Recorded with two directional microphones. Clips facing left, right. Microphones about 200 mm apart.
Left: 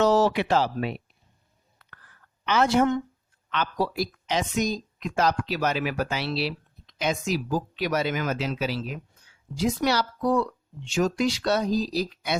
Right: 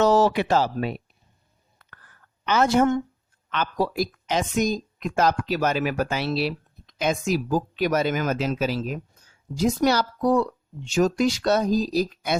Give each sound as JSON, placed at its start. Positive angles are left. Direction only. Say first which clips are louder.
{"t": 0.0, "sound": "speech", "louder": "right 2 dB", "side_deg": -45}
{"t": 2.4, "sound": "a woman's voice", "louder": "right 2 dB", "side_deg": -45}